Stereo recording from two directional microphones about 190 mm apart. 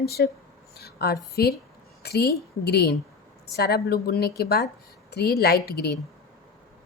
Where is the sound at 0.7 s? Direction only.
55° left (ahead or behind).